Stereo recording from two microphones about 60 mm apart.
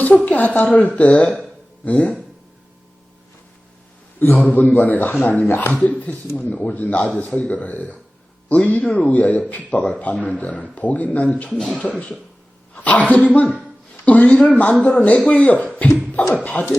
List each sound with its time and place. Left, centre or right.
0.3 s a woman's voice: left
4.2 s speech: left